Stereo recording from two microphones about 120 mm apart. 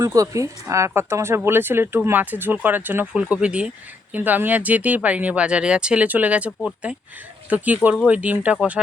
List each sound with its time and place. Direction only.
0.0 s speech: 25° right (ahead or behind)